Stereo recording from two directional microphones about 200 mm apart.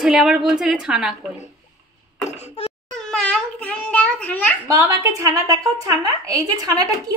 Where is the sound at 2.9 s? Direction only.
5° left (ahead or behind).